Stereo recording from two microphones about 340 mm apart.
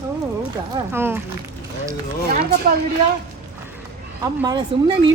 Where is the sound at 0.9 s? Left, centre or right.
Centre.